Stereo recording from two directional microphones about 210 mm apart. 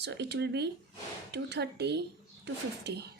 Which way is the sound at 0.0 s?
55° right (ahead or behind).